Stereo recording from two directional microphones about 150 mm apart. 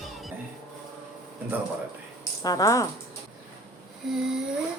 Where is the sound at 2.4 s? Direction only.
20° left (ahead or behind).